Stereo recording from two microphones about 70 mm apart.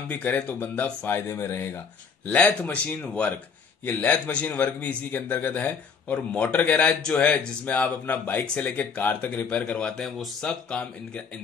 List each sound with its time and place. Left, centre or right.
0.1 s a man's voice: left
2.2 s a man's voice: left
10.0 s speech: centre
10.4 s speech: centre